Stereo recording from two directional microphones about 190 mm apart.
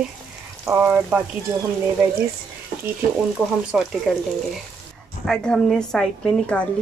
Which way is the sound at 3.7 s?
5° right (ahead or behind).